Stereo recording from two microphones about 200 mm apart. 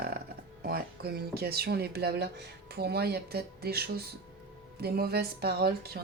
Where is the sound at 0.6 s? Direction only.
50° right (ahead or behind).